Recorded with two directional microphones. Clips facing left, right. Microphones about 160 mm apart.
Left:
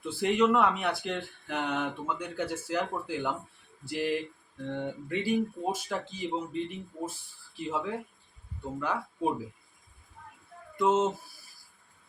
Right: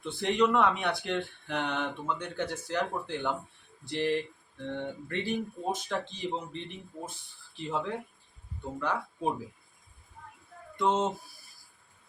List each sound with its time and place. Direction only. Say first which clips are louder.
0.0 s speech: left 1 dB; 5° left (ahead or behind)
10.8 s speech: left 2 dB; 5° left (ahead or behind)